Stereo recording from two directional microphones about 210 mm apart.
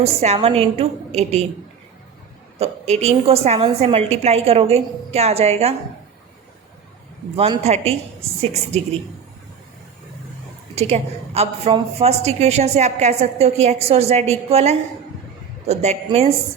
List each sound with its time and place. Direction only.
0.0 s a woman's voice: 30° right (ahead or behind)
2.6 s a woman's voice: 30° right (ahead or behind)
7.3 s a woman's voice: 30° right (ahead or behind)
10.8 s a woman's voice: 30° right (ahead or behind)